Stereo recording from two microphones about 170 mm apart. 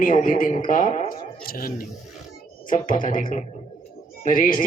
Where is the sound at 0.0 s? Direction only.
50° left (ahead or behind).